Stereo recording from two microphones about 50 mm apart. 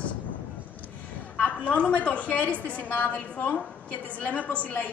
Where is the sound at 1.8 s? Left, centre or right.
Left.